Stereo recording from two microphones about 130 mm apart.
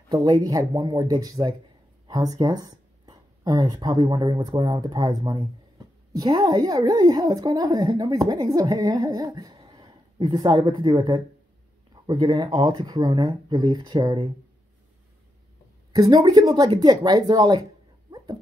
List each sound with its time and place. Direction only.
0.1 s a woman's voice: 30° right (ahead or behind)
15.9 s a woman's voice: 30° right (ahead or behind)
18.1 s dog: 30° right (ahead or behind)